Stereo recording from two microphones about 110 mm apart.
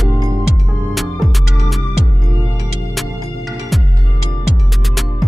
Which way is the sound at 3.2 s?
30° right (ahead or behind).